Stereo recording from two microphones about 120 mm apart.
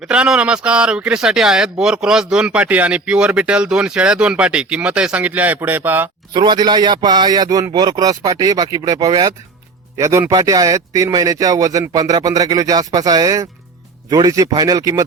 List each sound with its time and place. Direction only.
0.1 s speech: 10° right (ahead or behind)
6.3 s a man's voice: 40° right (ahead or behind)